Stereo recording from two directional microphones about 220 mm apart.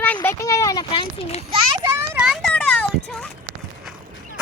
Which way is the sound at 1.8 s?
5° right (ahead or behind).